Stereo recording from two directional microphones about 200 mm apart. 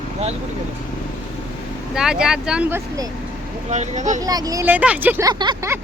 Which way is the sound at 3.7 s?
35° right (ahead or behind).